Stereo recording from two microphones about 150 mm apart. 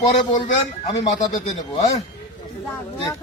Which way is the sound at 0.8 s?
50° left (ahead or behind).